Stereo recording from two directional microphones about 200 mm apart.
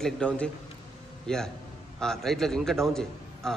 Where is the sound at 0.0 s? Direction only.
5° left (ahead or behind).